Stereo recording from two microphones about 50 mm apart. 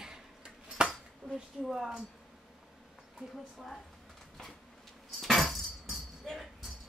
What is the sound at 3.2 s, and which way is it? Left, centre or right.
Speech, centre.